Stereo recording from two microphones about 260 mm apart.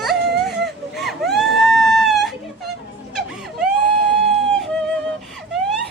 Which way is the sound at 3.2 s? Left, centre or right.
Centre.